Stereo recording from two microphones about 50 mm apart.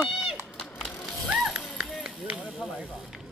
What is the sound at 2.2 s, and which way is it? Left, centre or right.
Speech, right.